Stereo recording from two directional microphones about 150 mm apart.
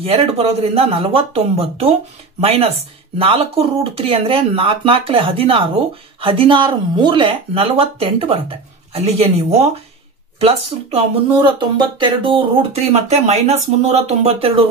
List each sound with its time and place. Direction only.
0.0 s speech: 40° right (ahead or behind)
11.0 s speech: 35° right (ahead or behind)